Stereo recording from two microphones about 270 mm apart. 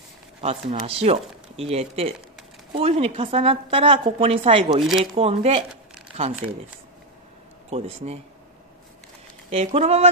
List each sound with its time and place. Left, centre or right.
0.4 s a woman's voice: right
6.1 s crumpling: centre
7.7 s a woman's voice: right
9.5 s a woman's voice: right